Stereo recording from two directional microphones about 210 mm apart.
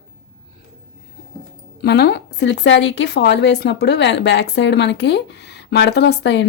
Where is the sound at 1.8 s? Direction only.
55° left (ahead or behind).